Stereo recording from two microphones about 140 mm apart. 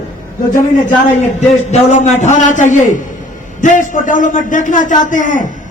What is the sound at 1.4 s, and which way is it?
A man's voice, 55° left (ahead or behind).